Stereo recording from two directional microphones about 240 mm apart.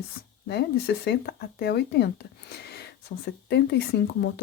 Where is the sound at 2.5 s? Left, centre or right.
Left.